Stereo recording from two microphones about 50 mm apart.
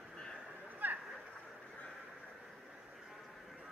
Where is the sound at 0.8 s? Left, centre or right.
Right.